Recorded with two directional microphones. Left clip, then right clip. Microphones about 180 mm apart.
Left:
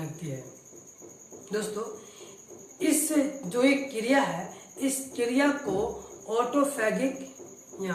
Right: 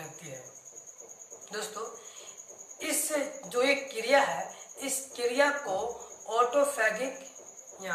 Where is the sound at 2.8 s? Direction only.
15° right (ahead or behind).